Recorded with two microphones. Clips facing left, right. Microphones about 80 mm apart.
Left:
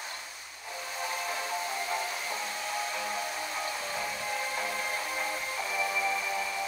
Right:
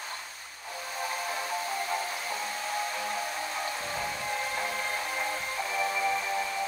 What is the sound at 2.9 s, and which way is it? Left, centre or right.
Music, centre.